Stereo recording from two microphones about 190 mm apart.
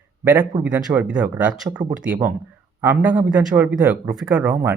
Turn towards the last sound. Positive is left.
turn(degrees=-10)  # may be behind; listen again after turning